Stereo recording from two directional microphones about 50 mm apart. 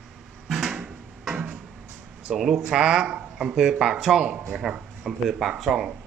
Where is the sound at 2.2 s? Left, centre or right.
Centre.